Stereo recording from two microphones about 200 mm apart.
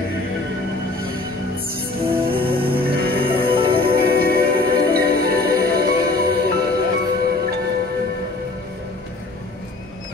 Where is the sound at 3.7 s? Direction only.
50° right (ahead or behind).